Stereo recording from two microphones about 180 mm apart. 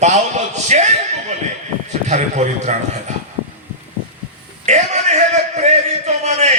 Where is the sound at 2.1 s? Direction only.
40° right (ahead or behind).